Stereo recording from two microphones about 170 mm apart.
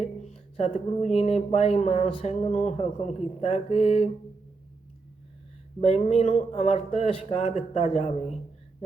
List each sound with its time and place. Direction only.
0.2 s speech: 40° left (ahead or behind)
5.8 s speech: 40° left (ahead or behind)